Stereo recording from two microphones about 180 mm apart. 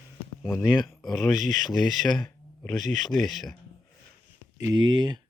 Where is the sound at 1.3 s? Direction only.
45° right (ahead or behind).